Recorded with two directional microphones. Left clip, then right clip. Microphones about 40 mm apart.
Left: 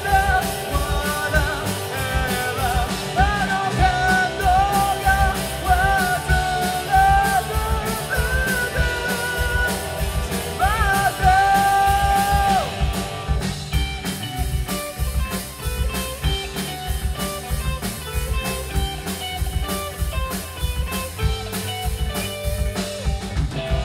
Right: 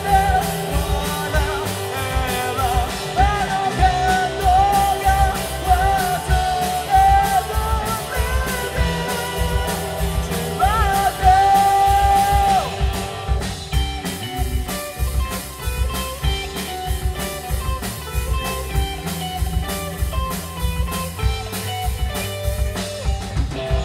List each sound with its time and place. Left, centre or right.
0.2 s music: right
0.5 s music: centre